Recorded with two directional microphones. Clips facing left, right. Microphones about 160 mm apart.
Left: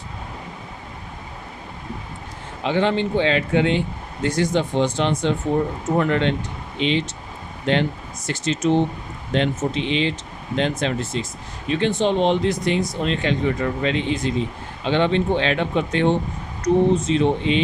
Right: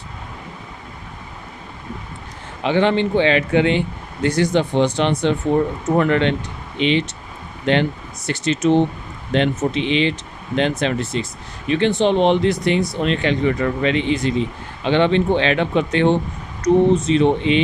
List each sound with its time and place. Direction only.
2.6 s speech: 70° right (ahead or behind)